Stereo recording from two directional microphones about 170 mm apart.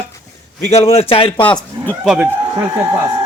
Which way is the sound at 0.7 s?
35° left (ahead or behind).